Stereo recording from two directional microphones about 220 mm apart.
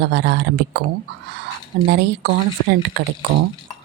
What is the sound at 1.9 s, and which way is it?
Speech, 45° right (ahead or behind).